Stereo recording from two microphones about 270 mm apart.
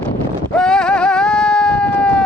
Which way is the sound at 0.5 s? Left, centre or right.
Centre.